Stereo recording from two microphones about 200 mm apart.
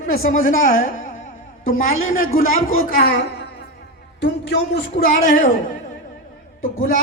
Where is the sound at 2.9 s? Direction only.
50° left (ahead or behind).